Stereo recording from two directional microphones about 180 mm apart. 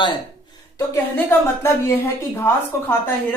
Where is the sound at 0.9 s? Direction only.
15° left (ahead or behind).